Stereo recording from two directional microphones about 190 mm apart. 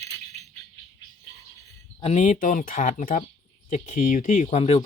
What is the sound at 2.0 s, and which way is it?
Speech, 35° left (ahead or behind).